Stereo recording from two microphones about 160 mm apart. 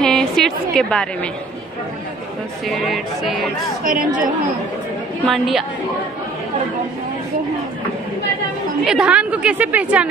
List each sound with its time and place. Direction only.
0.0 s a woman's voice: 5° left (ahead or behind)
2.7 s speech: centre (ahead or behind)
3.8 s a woman's voice: 55° right (ahead or behind)
5.2 s speech: centre (ahead or behind)
8.8 s a woman's voice: 5° right (ahead or behind)